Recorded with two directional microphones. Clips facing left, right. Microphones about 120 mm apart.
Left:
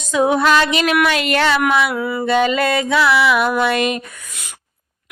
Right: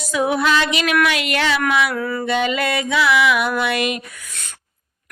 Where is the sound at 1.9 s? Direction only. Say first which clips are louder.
Left 2 dB; 20° left (ahead or behind).